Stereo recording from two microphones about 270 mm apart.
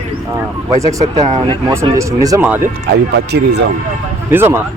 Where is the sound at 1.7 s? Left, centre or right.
Centre.